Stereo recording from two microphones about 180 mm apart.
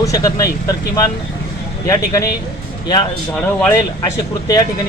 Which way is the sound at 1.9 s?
15° left (ahead or behind).